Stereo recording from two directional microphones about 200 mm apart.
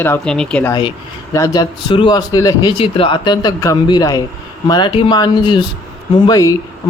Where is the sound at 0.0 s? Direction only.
5° left (ahead or behind).